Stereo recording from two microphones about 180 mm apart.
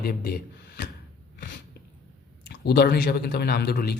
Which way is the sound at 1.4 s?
75° left (ahead or behind).